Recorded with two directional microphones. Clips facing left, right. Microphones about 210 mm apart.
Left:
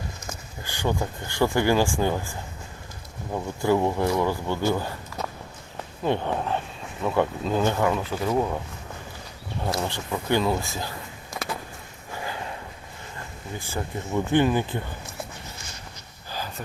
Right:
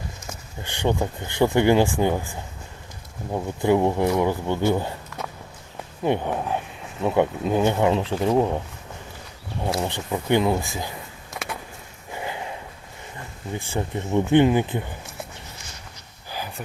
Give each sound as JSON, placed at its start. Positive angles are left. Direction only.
{"t": 0.6, "sound": "speech", "side_deg": -25}
{"t": 3.3, "sound": "speech", "side_deg": -20}
{"t": 6.0, "sound": "speech", "side_deg": -15}
{"t": 9.6, "sound": "speech", "side_deg": -15}
{"t": 12.1, "sound": "a sound", "side_deg": -20}
{"t": 13.7, "sound": "speech", "side_deg": -25}
{"t": 16.3, "sound": "a sound", "side_deg": -15}